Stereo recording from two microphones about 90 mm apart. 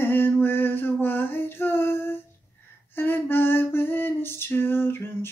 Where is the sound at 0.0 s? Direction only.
25° left (ahead or behind).